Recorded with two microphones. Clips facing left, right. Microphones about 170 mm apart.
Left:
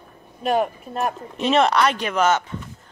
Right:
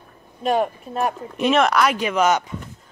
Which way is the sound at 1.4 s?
30° left (ahead or behind).